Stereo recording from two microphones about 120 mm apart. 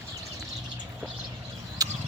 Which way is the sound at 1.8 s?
30° right (ahead or behind).